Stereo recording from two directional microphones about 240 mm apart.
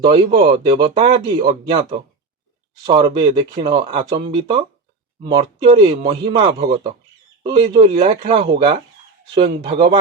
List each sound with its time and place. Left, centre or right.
0.0 s speech: right